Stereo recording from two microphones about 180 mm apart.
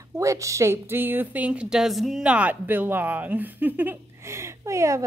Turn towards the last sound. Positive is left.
turn(degrees=-15)  # may be behind; listen again after turning